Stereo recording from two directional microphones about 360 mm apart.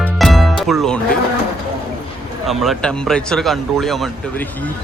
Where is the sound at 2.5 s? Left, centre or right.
Centre.